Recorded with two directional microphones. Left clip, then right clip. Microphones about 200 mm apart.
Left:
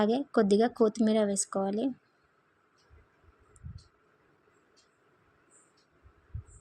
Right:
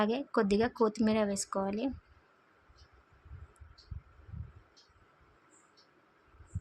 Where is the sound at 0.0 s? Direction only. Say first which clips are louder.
Left 4 dB; 25° left (ahead or behind).